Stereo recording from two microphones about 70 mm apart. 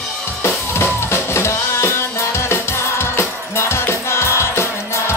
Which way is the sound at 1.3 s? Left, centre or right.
Left.